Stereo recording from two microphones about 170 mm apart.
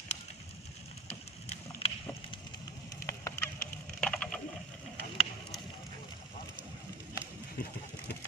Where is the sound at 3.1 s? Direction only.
20° left (ahead or behind).